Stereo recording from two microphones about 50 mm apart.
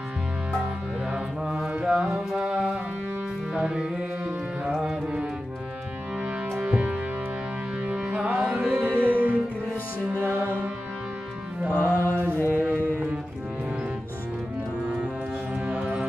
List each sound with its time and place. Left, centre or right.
1.1 s mantra: centre
1.9 s music: centre
2.4 s music: right
6.6 s music: right
11.7 s mantra: left
12.4 s music: right
15.6 s music: right